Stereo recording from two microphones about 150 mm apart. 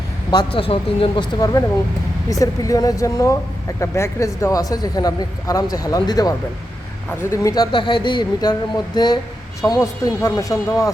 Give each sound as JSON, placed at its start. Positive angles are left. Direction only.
{"t": 0.3, "sound": "speech", "side_deg": 30}